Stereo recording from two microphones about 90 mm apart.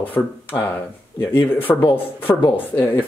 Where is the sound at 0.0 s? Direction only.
20° left (ahead or behind).